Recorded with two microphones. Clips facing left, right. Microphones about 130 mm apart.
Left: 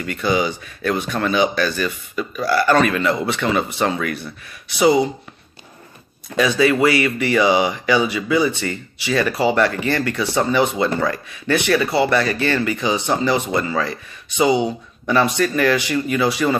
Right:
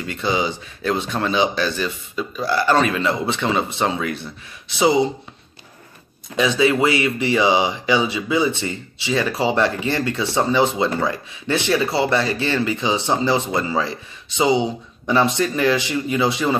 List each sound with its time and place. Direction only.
0.0 s speech: 25° right (ahead or behind)
6.3 s speech: 20° right (ahead or behind)